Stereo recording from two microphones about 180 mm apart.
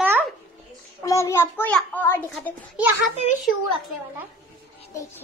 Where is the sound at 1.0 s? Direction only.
15° left (ahead or behind).